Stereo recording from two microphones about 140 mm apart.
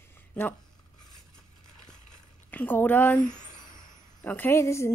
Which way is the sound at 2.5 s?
15° left (ahead or behind).